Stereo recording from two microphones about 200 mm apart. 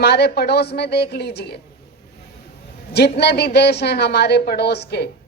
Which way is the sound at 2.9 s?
55° left (ahead or behind).